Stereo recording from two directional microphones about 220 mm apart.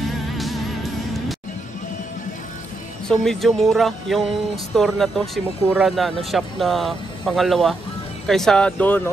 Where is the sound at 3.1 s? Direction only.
Centre (ahead or behind).